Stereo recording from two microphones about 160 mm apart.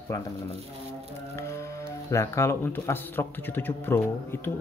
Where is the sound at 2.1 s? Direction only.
20° left (ahead or behind).